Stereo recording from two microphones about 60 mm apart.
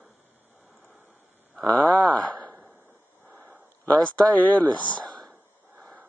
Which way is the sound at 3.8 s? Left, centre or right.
Left.